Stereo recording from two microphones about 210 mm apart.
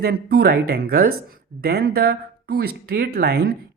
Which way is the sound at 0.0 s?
50° right (ahead or behind).